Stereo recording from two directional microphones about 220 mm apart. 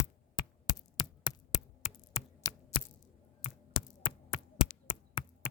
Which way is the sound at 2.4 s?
15° left (ahead or behind).